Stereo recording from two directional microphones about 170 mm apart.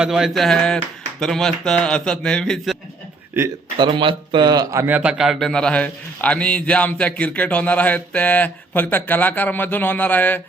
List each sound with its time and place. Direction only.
0.0 s a man's voice: 5° right (ahead or behind)
3.8 s speech: 30° right (ahead or behind)
4.9 s a man's voice: 5° right (ahead or behind)